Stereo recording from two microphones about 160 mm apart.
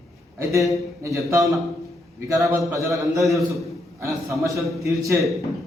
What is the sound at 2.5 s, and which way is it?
A man's voice, 20° right (ahead or behind).